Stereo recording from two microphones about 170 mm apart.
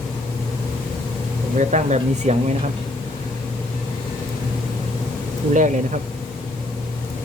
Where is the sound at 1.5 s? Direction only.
45° right (ahead or behind).